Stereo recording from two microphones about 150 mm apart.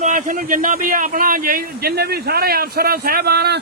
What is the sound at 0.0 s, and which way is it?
A man's voice, 65° right (ahead or behind).